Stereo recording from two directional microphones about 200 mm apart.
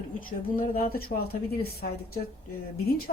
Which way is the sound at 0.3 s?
45° left (ahead or behind).